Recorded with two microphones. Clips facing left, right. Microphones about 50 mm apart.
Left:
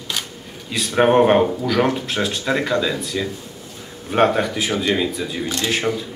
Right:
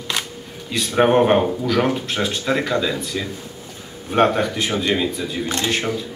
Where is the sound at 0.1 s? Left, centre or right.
Right.